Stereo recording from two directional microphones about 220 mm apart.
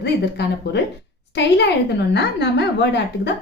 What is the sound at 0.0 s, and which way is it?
A woman's voice, 50° left (ahead or behind).